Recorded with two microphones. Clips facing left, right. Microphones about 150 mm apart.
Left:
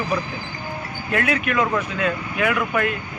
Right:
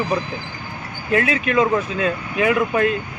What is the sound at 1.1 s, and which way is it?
Speech, 30° right (ahead or behind).